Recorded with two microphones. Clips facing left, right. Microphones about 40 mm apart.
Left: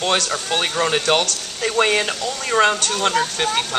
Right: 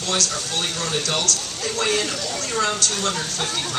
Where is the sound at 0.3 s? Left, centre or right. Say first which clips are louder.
Left 5 dB; left.